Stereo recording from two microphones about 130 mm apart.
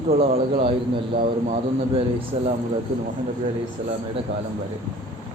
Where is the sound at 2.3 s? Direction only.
55° right (ahead or behind).